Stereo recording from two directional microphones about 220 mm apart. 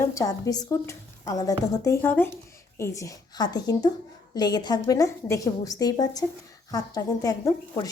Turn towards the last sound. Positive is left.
turn(degrees=15)  # may be behind; listen again after turning